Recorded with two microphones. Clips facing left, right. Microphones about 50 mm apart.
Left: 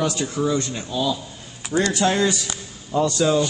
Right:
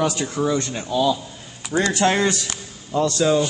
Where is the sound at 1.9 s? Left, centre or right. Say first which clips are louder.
Right 2 dB; right.